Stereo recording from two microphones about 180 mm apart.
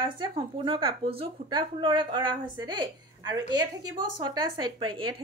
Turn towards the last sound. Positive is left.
turn(degrees=-30)  # may be behind; listen again after turning